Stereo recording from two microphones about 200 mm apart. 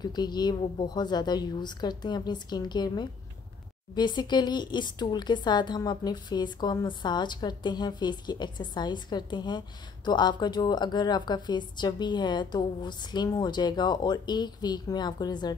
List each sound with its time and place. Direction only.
0.0 s speech: 20° left (ahead or behind)